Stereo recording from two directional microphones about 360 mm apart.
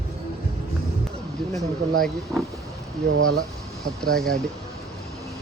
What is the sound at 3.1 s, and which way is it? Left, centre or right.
Speech, right.